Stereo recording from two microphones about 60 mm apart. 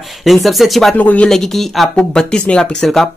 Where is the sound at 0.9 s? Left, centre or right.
Left.